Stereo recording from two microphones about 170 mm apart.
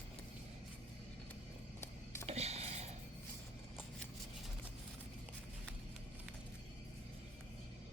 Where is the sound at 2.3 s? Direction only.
40° right (ahead or behind).